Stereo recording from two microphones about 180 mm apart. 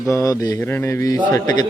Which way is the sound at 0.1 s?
20° left (ahead or behind).